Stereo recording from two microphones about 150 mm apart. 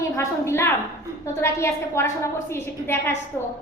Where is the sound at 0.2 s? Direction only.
20° left (ahead or behind).